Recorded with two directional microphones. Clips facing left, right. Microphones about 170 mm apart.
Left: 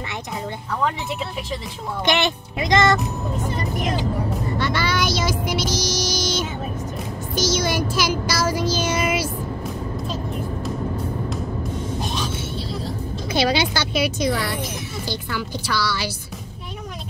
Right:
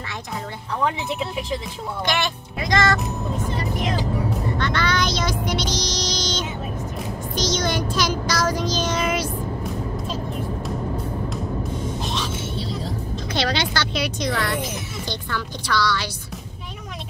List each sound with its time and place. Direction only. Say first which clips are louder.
2.0 s speech: left 5 dB; 20° left (ahead or behind)
4.3 s music: left 1 dB; 10° left (ahead or behind)
7.3 s child singing: left 2 dB; 5° left (ahead or behind)
13.3 s a woman's voice: left 4 dB; 10° left (ahead or behind)